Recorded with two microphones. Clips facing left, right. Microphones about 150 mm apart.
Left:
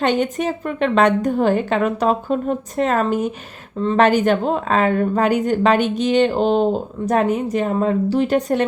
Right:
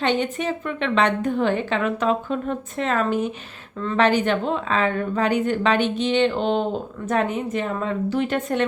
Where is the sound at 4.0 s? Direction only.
45° left (ahead or behind).